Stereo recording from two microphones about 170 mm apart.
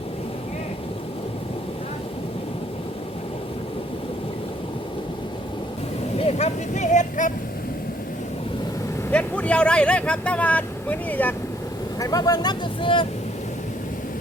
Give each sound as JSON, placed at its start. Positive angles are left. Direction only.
{"t": 6.1, "sound": "vehicle", "side_deg": 35}
{"t": 9.1, "sound": "speech", "side_deg": 10}
{"t": 11.9, "sound": "speech", "side_deg": 20}